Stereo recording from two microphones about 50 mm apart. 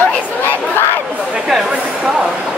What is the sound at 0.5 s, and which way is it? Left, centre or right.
Crowd, left.